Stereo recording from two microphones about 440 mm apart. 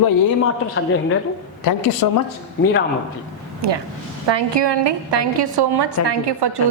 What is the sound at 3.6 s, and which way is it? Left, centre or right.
A woman's voice, right.